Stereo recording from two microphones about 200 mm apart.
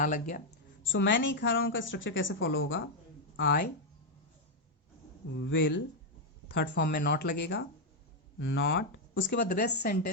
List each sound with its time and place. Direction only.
0.0 s speech: 40° left (ahead or behind)
0.9 s a woman's voice: 65° left (ahead or behind)
3.3 s speech: 65° left (ahead or behind)
5.4 s a woman's voice: 65° left (ahead or behind)